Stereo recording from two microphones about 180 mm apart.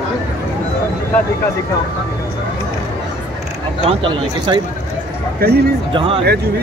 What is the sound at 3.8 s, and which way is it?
Speech, 30° right (ahead or behind).